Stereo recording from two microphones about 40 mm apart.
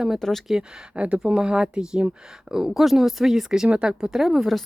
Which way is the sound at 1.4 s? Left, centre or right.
Right.